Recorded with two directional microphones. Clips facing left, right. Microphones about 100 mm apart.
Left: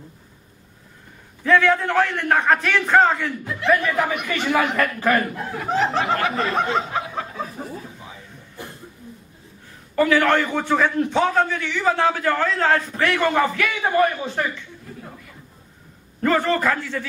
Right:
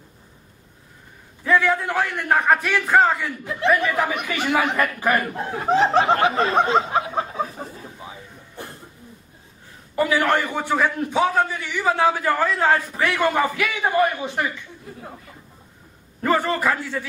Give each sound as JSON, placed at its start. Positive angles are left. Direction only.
{"t": 1.4, "sound": "a man's voice", "side_deg": -10}
{"t": 5.5, "sound": "snicker", "side_deg": -25}
{"t": 9.9, "sound": "a man's voice", "side_deg": -15}
{"t": 16.2, "sound": "a man's voice", "side_deg": -10}